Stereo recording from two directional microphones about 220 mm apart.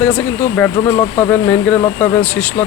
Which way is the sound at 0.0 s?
5° left (ahead or behind).